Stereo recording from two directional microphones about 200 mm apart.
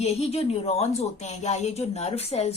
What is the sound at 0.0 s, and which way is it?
A woman's voice, 30° left (ahead or behind).